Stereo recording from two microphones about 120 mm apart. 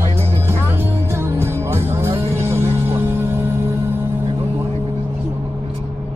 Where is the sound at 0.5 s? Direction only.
20° right (ahead or behind).